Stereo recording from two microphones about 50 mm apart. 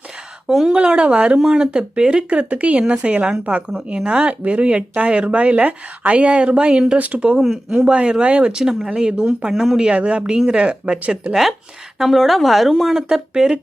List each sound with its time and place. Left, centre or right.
0.4 s speech: centre
1.4 s speech: centre; by 7.3 s right
7.3 s speech: centre
7.7 s speech: right
11.9 s speech: centre